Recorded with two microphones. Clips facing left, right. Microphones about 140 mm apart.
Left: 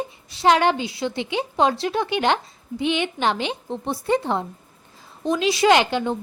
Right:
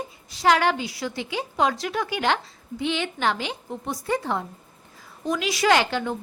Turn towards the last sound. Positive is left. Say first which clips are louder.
# left 3 dB
turn(degrees=20)  # may be behind; listen again after turning